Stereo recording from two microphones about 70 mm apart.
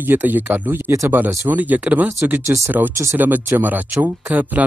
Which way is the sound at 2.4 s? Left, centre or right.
Right.